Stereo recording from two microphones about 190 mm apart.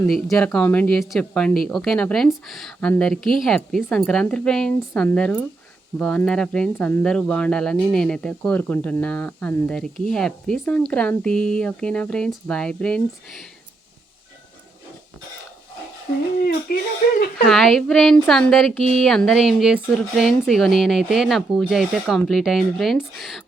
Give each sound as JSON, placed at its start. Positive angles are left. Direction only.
{"t": 0.1, "sound": "speech", "side_deg": 0}
{"t": 16.4, "sound": "speech", "side_deg": 50}
{"t": 17.4, "sound": "speech", "side_deg": 0}